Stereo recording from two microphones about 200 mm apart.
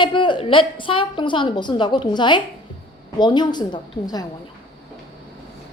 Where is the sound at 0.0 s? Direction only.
25° left (ahead or behind).